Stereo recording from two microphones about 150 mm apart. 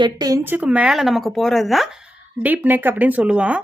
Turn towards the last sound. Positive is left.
turn(degrees=-10)  # may be behind; listen again after turning